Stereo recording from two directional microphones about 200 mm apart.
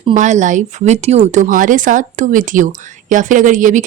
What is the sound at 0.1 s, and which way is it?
Speech, 35° right (ahead or behind).